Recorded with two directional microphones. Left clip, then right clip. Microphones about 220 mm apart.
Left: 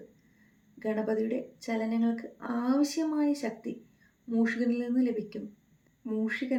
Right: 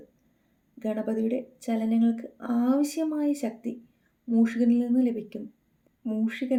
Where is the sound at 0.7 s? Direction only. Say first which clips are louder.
Even; 45° right (ahead or behind).